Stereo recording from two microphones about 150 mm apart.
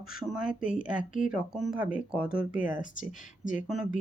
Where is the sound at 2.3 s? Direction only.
70° left (ahead or behind).